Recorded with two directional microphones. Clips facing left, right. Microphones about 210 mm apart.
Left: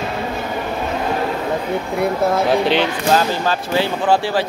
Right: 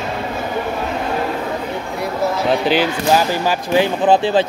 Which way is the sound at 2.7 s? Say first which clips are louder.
Right 1 dB; 5° right (ahead or behind).